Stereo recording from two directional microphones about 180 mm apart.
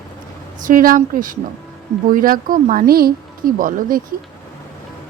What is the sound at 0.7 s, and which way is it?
Speech, 50° right (ahead or behind).